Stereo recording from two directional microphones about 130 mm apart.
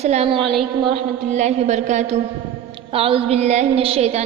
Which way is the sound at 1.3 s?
65° right (ahead or behind).